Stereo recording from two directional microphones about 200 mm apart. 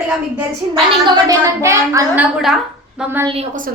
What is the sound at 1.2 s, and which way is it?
A woman's voice, 15° right (ahead or behind).